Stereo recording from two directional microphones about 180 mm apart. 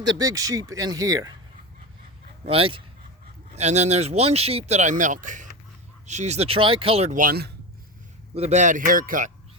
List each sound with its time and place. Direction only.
0.2 s speech: 20° right (ahead or behind)
2.5 s speech: 30° right (ahead or behind)
7.1 s speech: 50° right (ahead or behind)
8.4 s speech: 40° right (ahead or behind)